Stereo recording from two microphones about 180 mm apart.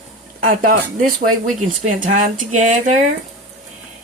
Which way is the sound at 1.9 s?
45° right (ahead or behind).